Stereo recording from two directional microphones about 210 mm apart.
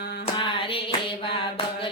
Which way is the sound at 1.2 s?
25° left (ahead or behind).